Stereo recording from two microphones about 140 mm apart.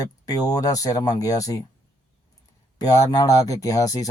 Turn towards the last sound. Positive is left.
turn(degrees=25)  # may be behind; listen again after turning